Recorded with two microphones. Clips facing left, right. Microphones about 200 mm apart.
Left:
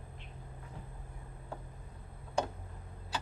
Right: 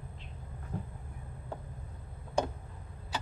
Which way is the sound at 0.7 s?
45° right (ahead or behind).